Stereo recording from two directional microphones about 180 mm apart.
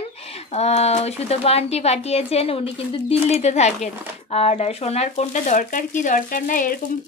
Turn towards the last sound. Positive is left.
turn(degrees=50)  # may be behind; listen again after turning